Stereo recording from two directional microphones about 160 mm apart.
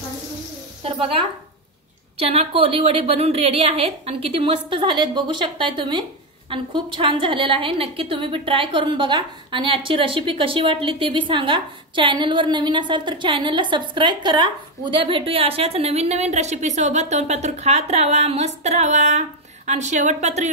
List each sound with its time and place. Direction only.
2.1 s a woman's voice: 40° right (ahead or behind)